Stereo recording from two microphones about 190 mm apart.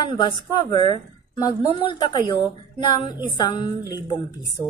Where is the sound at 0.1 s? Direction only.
20° left (ahead or behind).